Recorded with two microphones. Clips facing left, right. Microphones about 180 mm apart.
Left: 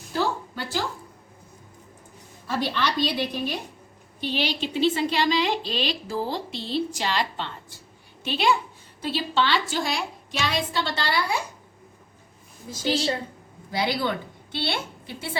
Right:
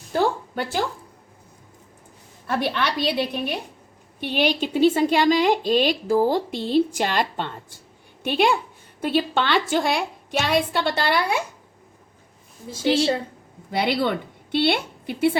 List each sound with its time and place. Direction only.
0.1 s a sound: 55° right (ahead or behind)
2.5 s a woman's voice: 60° right (ahead or behind)
12.7 s a woman's voice: 30° right (ahead or behind)
13.7 s a woman's voice: 60° right (ahead or behind)